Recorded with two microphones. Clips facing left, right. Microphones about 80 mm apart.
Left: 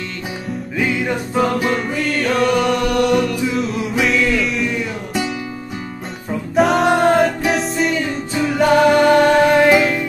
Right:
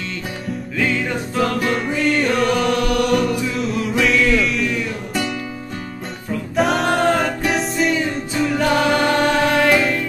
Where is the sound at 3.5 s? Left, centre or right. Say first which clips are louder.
Left 1 dB; centre.